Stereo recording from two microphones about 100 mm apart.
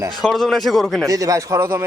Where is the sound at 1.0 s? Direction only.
35° right (ahead or behind).